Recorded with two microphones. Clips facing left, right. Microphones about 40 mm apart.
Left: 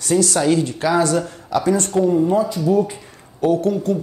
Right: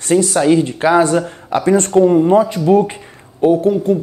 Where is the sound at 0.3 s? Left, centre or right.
Centre; by 2.9 s right.